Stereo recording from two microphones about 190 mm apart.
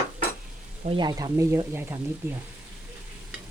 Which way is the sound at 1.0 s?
20° right (ahead or behind).